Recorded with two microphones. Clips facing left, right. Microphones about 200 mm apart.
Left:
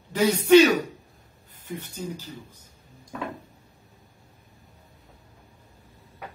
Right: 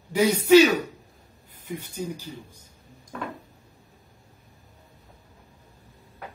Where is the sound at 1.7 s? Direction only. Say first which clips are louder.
Right 1 dB; 10° right (ahead or behind).